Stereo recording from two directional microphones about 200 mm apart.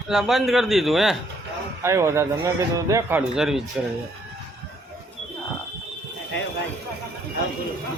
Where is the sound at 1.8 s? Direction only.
15° right (ahead or behind).